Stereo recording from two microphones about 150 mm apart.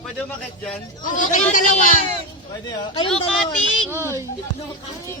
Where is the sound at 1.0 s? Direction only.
60° left (ahead or behind).